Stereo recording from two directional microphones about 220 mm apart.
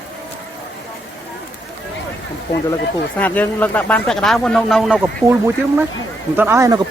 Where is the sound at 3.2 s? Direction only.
5° left (ahead or behind).